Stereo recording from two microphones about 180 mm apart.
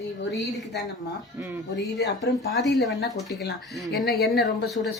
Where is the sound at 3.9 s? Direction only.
60° left (ahead or behind).